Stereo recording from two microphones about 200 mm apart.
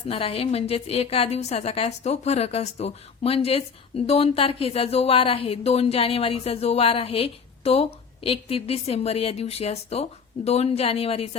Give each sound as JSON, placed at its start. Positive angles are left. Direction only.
{"t": 0.1, "sound": "a woman's voice", "side_deg": 30}